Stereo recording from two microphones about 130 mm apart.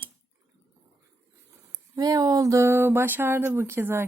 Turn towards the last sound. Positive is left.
turn(degrees=-20)  # may be behind; listen again after turning